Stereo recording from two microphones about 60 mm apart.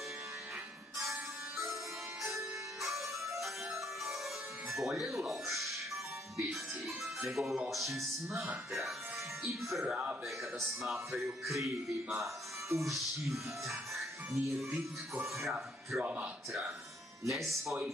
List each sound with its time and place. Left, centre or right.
1.0 s music: right
4.6 s speech: centre
9.5 s speech: centre
12.6 s music: centre
15.4 s speech: centre
16.0 s speech: right
17.3 s speech: centre